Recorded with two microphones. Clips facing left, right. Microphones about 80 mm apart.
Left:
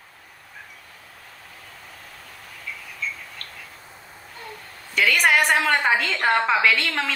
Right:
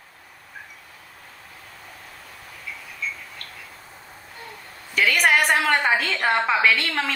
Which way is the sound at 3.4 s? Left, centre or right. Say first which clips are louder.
Even; left.